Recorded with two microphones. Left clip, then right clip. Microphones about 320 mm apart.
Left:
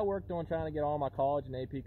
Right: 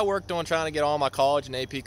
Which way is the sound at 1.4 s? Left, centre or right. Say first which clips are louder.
Right 9 dB; centre.